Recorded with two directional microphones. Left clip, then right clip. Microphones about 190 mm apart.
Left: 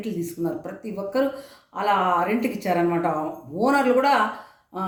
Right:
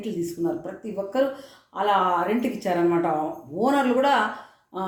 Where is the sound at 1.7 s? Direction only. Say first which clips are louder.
Even; 15° left (ahead or behind).